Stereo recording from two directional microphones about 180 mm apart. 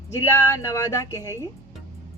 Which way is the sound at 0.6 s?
15° left (ahead or behind).